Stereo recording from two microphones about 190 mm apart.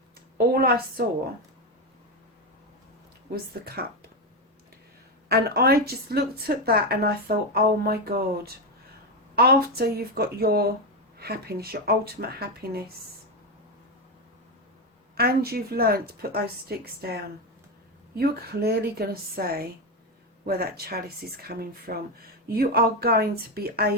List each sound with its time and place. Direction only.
0.3 s a woman's voice: 55° right (ahead or behind)
3.3 s speech: 55° right (ahead or behind)
5.3 s speech: 55° right (ahead or behind)
15.1 s speech: 55° right (ahead or behind)
18.2 s speech: 55° right (ahead or behind)